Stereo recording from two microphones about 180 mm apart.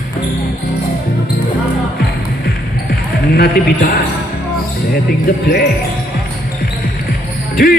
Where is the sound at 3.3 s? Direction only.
60° left (ahead or behind).